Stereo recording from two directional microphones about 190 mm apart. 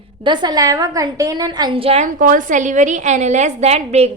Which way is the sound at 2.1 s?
45° right (ahead or behind).